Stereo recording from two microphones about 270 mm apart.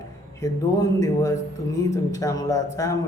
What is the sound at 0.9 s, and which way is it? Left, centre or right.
Speech, centre.